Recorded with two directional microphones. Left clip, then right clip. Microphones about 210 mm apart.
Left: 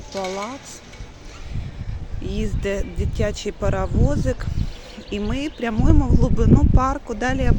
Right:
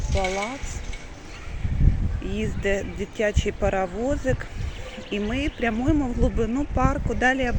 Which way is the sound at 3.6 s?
5° left (ahead or behind).